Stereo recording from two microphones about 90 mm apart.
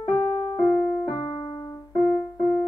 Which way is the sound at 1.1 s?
60° left (ahead or behind).